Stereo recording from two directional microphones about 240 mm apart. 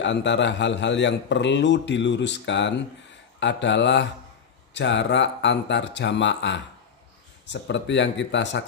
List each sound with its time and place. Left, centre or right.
0.0 s speech: left